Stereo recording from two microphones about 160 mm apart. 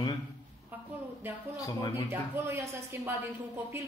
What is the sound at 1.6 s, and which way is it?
Speech, 20° left (ahead or behind).